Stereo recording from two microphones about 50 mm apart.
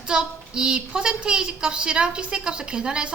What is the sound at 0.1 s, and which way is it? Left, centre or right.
A woman's voice, centre.